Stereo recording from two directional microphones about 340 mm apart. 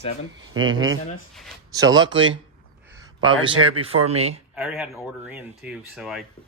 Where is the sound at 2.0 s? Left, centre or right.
Right.